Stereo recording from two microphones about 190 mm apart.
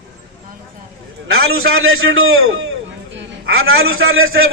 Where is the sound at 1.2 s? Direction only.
90° right.